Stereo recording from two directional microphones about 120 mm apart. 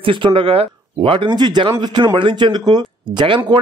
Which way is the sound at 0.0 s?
45° right (ahead or behind).